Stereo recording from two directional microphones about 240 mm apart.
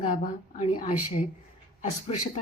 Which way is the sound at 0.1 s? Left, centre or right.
Left.